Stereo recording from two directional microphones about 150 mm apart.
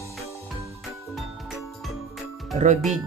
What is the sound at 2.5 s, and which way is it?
Speech, 55° right (ahead or behind).